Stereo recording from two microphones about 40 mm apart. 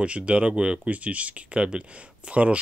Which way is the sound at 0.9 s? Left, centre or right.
Right.